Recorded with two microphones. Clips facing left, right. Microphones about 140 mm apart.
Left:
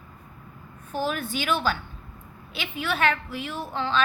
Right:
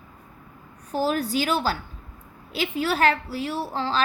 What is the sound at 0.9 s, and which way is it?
A woman's voice, 35° right (ahead or behind).